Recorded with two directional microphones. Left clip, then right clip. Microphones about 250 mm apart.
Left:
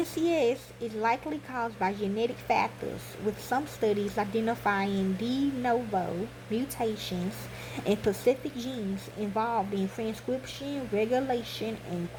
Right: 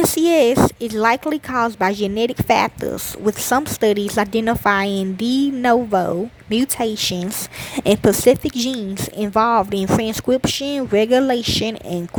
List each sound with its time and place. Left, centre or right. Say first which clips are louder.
0.1 s speech: right 12 dB; right